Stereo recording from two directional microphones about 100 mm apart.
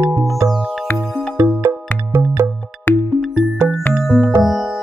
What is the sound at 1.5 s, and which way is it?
Music, 20° right (ahead or behind).